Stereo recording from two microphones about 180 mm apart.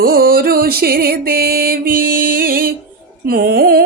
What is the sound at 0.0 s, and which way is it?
Music, 55° right (ahead or behind).